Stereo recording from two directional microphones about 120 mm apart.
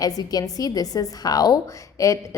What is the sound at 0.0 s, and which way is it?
A woman's voice, 30° left (ahead or behind).